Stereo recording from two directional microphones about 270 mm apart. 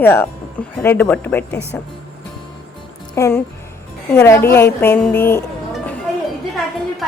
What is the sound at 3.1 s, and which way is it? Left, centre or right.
Speech, centre.